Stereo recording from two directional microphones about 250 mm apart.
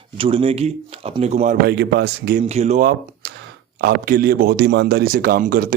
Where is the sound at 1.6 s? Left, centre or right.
Right.